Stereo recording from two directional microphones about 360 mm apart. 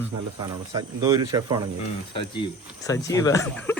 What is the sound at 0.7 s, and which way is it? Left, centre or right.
Speech, centre.